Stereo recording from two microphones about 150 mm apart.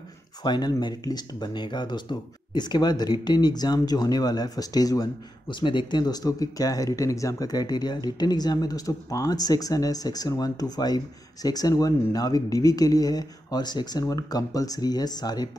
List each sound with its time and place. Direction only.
0.4 s speech: 30° left (ahead or behind)